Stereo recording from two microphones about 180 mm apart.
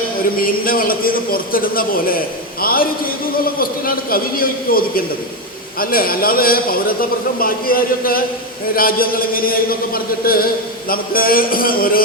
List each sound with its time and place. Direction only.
0.3 s a man's voice: 55° left (ahead or behind)